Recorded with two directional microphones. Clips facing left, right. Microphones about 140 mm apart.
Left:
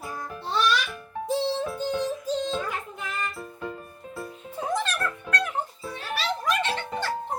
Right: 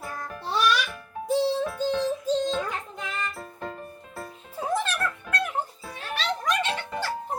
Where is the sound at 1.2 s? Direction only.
20° left (ahead or behind).